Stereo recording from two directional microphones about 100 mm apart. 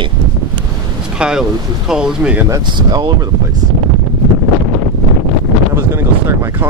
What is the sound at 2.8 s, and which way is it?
Speech, 45° right (ahead or behind).